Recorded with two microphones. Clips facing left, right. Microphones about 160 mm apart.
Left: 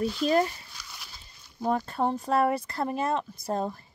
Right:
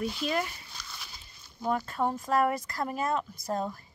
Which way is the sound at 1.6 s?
30° left (ahead or behind).